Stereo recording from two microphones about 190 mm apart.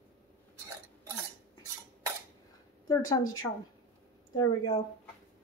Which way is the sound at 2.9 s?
20° left (ahead or behind).